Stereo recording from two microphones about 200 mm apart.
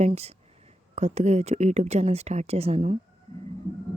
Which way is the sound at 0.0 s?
35° right (ahead or behind).